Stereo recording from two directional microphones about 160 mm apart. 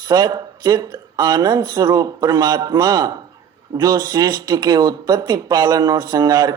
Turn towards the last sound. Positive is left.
turn(degrees=-25)  # may be behind; listen again after turning